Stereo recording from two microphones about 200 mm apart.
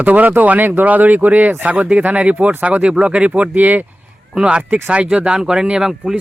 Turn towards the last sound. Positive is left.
turn(degrees=0)  # may be behind; listen again after turning